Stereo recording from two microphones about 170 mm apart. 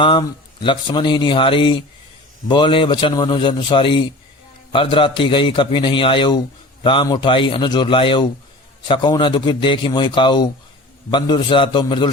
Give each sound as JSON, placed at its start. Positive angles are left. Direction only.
{"t": 0.0, "sound": "speech", "side_deg": 30}